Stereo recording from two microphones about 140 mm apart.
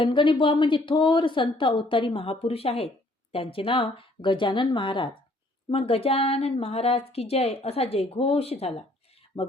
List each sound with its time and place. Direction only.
0.0 s a woman's voice: 35° left (ahead or behind)